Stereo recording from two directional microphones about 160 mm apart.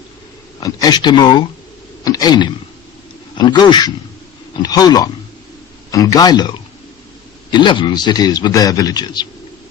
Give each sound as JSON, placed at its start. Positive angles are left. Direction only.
{"t": 0.6, "sound": "a man's voice", "side_deg": 25}